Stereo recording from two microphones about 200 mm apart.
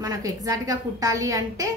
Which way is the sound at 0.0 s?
15° right (ahead or behind).